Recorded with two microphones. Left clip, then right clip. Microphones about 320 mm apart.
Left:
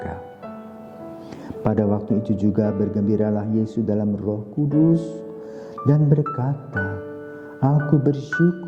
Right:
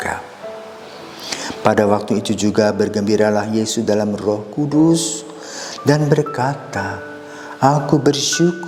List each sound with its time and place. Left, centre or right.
1.3 s speech: centre
7.6 s speech: centre
8.0 s speech: centre